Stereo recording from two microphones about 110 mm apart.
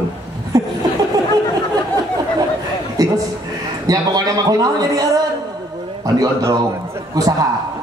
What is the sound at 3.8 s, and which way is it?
A man's voice, 35° right (ahead or behind).